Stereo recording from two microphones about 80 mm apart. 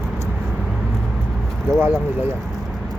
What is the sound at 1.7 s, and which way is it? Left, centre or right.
Speech, right.